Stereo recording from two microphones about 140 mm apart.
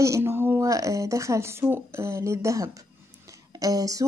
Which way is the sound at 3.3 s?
25° right (ahead or behind).